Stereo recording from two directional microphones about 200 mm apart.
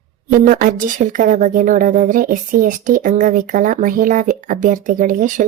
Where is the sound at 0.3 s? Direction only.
40° right (ahead or behind).